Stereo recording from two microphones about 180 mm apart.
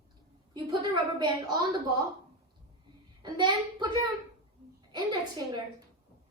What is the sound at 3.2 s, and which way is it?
A woman's voice, 25° right (ahead or behind).